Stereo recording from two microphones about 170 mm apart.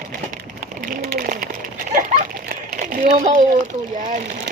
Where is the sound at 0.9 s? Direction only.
60° right (ahead or behind).